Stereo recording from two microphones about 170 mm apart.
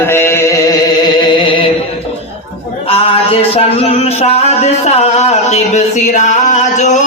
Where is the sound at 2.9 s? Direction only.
35° left (ahead or behind).